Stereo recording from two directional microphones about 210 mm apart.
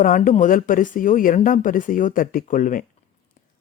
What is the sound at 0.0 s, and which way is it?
Speech, 40° left (ahead or behind).